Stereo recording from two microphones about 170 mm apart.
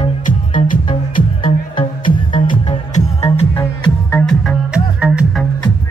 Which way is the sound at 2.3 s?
50° left (ahead or behind).